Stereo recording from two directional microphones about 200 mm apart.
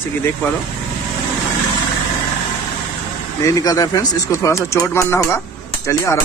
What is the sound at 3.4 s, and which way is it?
Speech, 20° left (ahead or behind).